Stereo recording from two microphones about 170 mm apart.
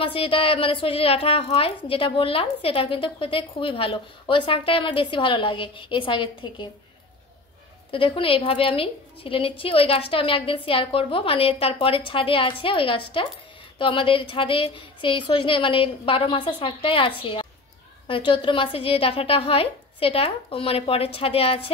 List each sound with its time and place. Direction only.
0.0 s a woman's voice: 30° left (ahead or behind)
7.9 s a woman's voice: 30° left (ahead or behind)